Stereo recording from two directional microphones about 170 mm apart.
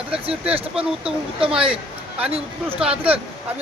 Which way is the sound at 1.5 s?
5° right (ahead or behind).